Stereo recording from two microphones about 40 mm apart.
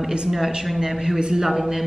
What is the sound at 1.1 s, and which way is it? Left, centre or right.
Speech, right.